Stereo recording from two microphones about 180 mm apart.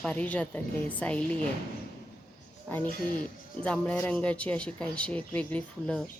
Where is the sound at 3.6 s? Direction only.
5° left (ahead or behind).